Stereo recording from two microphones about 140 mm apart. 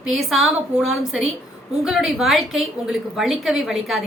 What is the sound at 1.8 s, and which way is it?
A woman's voice, 5° right (ahead or behind).